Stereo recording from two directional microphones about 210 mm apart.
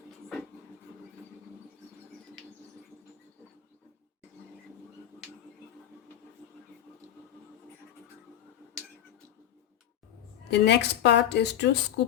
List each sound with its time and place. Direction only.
10.5 s speech: 55° left (ahead or behind)